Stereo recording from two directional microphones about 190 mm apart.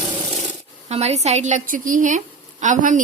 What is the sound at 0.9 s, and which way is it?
A woman's voice, 35° right (ahead or behind).